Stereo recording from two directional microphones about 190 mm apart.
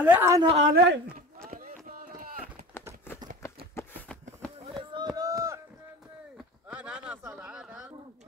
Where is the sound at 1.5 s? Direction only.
45° right (ahead or behind).